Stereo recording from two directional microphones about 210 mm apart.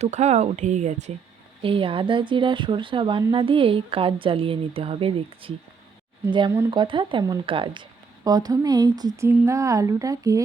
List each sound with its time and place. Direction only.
0.0 s speech: 30° right (ahead or behind); by 10.4 s 15° right (ahead or behind)